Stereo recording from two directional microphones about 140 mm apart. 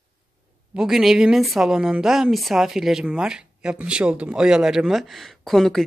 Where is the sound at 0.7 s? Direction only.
5° right (ahead or behind).